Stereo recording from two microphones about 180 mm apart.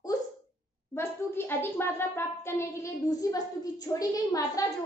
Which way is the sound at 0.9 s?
15° left (ahead or behind).